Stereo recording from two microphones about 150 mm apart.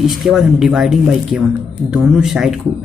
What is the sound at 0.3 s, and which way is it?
Speech, 5° right (ahead or behind).